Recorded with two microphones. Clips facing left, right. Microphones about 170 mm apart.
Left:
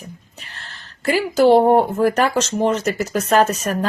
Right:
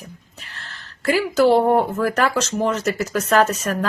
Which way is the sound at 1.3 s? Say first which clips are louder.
Left 3 dB; 25° left (ahead or behind).